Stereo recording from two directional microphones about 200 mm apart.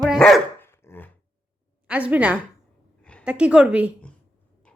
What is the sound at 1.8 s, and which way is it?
A woman's voice, 5° right (ahead or behind).